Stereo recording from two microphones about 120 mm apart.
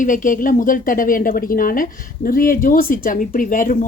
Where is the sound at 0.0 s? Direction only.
90° left.